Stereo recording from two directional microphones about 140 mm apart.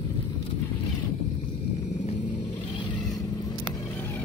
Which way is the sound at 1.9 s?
60° left (ahead or behind).